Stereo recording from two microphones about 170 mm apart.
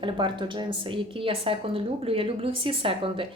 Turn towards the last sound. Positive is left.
turn(degrees=-30)  # may be behind; listen again after turning